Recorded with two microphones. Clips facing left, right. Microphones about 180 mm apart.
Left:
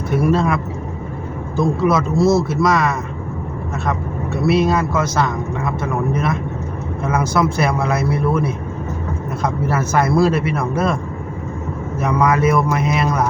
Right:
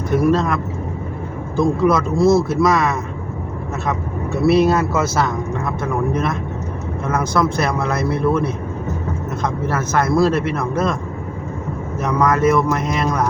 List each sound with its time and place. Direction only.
0.3 s a man's voice: 10° left (ahead or behind)
4.4 s a man's voice: centre (ahead or behind)
12.0 s a man's voice: 10° left (ahead or behind)